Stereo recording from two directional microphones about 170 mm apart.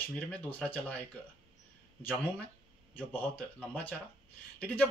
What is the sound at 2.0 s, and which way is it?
Speech, 10° left (ahead or behind).